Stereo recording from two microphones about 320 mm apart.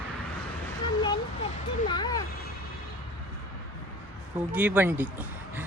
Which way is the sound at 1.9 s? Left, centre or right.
Centre.